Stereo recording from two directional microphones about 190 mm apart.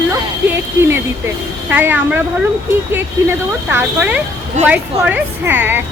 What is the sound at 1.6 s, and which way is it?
Speech, 10° right (ahead or behind).